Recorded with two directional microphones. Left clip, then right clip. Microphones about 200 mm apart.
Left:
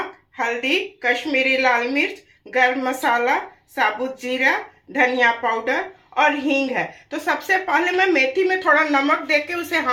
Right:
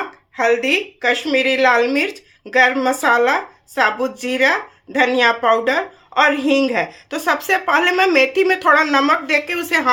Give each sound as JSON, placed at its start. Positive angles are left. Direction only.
{"t": 0.3, "sound": "speech", "side_deg": -50}